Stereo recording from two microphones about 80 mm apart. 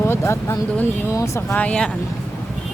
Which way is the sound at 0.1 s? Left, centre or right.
Left.